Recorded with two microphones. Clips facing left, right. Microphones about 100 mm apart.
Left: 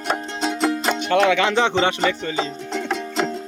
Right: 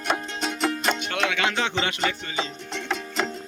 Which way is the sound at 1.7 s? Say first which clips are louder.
Left 7 dB; 35° left (ahead or behind).